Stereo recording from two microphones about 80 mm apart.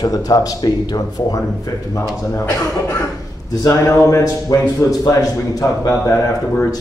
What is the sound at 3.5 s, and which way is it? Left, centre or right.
A man's voice, left.